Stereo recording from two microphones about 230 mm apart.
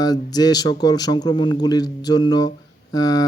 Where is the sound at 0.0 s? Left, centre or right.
Centre.